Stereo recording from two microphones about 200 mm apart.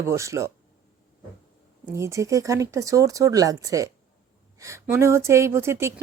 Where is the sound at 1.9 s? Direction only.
15° right (ahead or behind).